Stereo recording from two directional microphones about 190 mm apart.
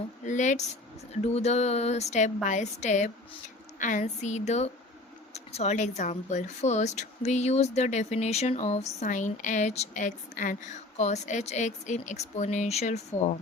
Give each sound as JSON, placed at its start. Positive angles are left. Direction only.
{"t": 0.3, "sound": "speech", "side_deg": 40}